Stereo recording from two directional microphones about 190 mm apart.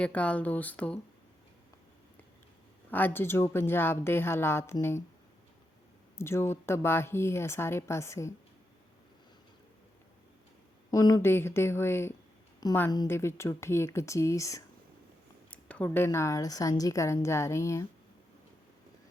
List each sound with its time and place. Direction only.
0.0 s a woman's voice: 5° left (ahead or behind)
2.9 s a woman's voice: 10° left (ahead or behind)
6.1 s a woman's voice: 15° left (ahead or behind)
10.9 s a woman's voice: 20° left (ahead or behind)